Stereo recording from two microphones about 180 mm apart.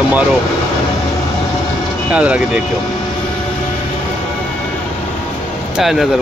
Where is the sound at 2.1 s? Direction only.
5° right (ahead or behind).